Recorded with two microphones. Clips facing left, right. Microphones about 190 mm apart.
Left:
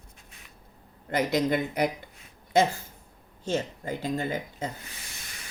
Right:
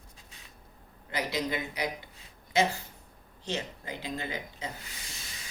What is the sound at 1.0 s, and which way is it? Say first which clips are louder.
Speech: left 7 dB; 50° left (ahead or behind).